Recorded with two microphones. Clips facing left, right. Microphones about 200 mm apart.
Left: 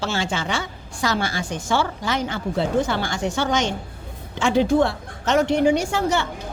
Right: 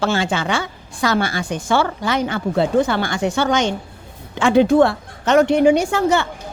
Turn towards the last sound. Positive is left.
turn(degrees=-60)  # may be behind; listen again after turning